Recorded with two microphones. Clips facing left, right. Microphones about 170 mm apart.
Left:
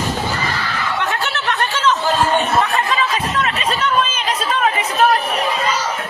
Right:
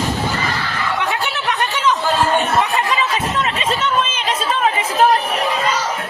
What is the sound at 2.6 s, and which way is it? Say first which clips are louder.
Chatter: even; 15° right (ahead or behind).